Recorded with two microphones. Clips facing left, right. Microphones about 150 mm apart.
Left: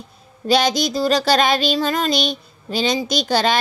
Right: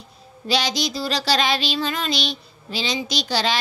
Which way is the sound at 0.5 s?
50° left (ahead or behind).